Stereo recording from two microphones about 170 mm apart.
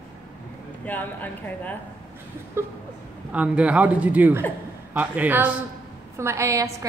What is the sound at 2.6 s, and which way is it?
A man's voice, 15° right (ahead or behind).